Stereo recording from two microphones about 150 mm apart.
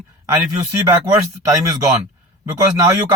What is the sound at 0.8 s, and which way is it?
A man's voice, 20° right (ahead or behind).